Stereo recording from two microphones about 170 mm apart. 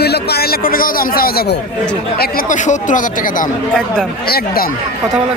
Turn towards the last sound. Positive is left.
turn(degrees=65)  # may be behind; listen again after turning